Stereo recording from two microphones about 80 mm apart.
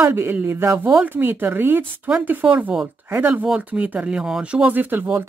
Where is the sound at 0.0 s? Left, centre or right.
Right.